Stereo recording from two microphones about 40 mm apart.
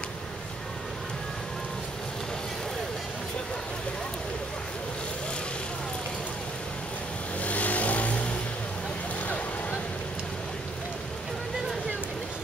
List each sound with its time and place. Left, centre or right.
7.4 s vehicle: left